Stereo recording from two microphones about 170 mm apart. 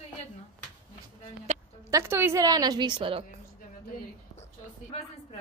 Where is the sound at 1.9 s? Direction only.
15° right (ahead or behind).